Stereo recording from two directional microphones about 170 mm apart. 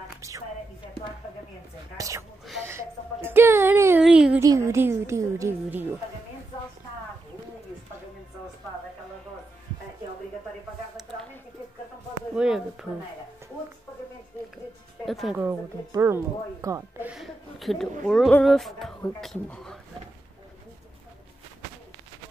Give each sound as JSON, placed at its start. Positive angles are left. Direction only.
{"t": 0.2, "sound": "speech", "side_deg": -15}
{"t": 2.0, "sound": "a woman's voice", "side_deg": -20}
{"t": 2.6, "sound": "a sound", "side_deg": -15}
{"t": 4.0, "sound": "a woman's voice", "side_deg": -5}
{"t": 4.4, "sound": "a woman's voice", "side_deg": -20}
{"t": 12.4, "sound": "speech", "side_deg": -5}
{"t": 15.0, "sound": "speech", "side_deg": 0}
{"t": 15.4, "sound": "a woman's voice", "side_deg": -15}
{"t": 17.1, "sound": "a sound", "side_deg": 0}
{"t": 18.0, "sound": "speech", "side_deg": 5}